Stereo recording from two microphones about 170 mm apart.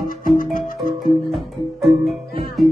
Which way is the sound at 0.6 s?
50° left (ahead or behind).